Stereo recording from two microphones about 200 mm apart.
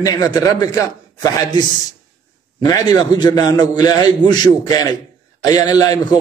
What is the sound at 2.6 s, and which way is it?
A man's voice, 20° left (ahead or behind).